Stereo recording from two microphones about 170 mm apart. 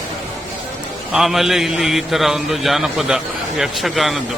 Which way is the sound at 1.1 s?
Centre (ahead or behind).